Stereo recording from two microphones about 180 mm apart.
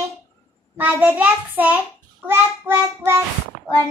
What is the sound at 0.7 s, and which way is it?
Child singing, 10° right (ahead or behind).